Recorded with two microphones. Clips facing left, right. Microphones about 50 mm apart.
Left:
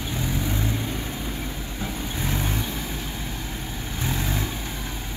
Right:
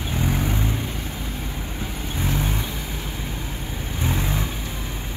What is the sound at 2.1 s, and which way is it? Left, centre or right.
Vehicle, centre.